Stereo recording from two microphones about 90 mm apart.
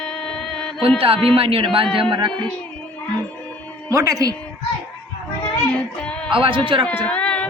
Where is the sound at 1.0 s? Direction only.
90° right; by 2.4 s 60° right (ahead or behind).